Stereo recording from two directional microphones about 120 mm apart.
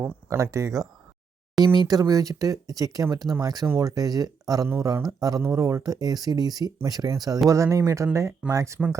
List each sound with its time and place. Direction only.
0.0 s speech: 25° right (ahead or behind)